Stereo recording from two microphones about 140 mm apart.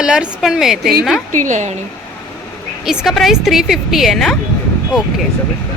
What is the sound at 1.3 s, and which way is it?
Speech, 65° right (ahead or behind).